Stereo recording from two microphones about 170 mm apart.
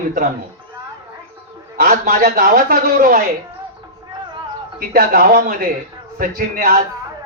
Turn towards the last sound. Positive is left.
turn(degrees=-55)  # may be behind; listen again after turning